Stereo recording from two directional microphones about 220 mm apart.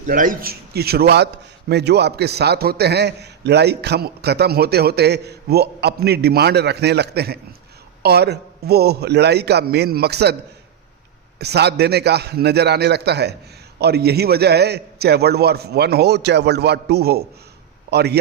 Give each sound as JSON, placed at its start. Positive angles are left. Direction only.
{"t": 0.0, "sound": "a man's voice", "side_deg": -40}
{"t": 11.3, "sound": "a man's voice", "side_deg": -50}